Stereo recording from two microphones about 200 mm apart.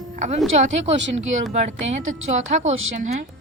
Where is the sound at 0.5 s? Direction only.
35° right (ahead or behind).